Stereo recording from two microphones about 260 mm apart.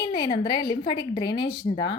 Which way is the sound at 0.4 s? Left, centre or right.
Centre.